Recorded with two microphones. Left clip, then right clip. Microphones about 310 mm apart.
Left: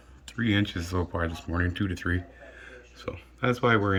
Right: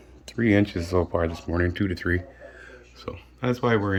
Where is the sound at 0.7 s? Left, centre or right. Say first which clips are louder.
Right 7 dB; centre.